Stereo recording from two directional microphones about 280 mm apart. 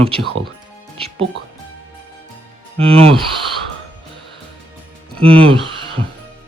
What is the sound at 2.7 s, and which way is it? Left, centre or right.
Speech, centre.